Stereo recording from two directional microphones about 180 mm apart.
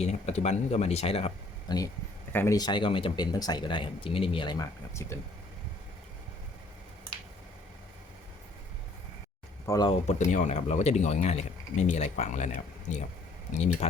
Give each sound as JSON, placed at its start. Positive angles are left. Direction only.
{"t": 0.0, "sound": "speech", "side_deg": 40}
{"t": 2.3, "sound": "speech", "side_deg": 15}
{"t": 9.6, "sound": "speech", "side_deg": 20}
{"t": 9.9, "sound": "speech", "side_deg": 40}